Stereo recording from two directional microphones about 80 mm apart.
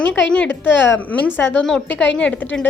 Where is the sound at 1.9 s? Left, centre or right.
Centre.